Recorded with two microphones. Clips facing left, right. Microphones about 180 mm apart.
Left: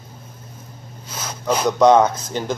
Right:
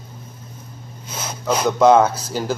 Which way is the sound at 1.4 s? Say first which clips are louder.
Even; 5° right (ahead or behind).